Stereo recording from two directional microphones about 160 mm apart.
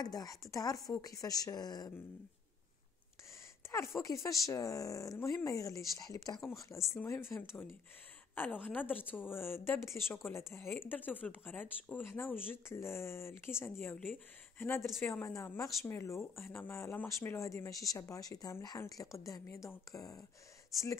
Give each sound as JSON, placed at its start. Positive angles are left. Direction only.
{"t": 0.0, "sound": "speech", "side_deg": 25}
{"t": 3.7, "sound": "speech", "side_deg": 20}